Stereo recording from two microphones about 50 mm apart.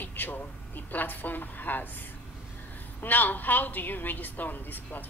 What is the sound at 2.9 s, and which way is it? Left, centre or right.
Speech, left.